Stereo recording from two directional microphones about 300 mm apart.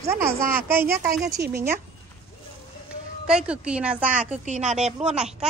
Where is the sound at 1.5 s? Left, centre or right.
Centre.